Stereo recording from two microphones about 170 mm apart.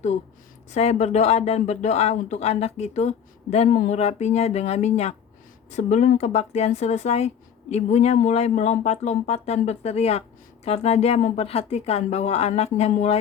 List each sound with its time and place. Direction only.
0.7 s speech: 40° left (ahead or behind)